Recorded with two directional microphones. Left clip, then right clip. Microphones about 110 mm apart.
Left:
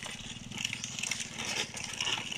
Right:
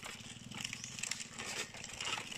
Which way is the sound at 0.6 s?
15° left (ahead or behind).